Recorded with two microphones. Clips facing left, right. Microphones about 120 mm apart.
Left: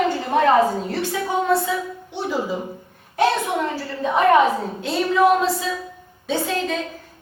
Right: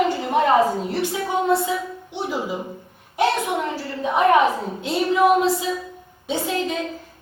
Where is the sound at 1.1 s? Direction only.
20° right (ahead or behind).